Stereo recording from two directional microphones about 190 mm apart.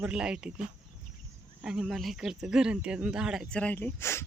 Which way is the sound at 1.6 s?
5° right (ahead or behind).